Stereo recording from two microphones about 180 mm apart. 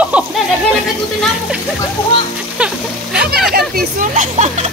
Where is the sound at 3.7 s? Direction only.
45° right (ahead or behind).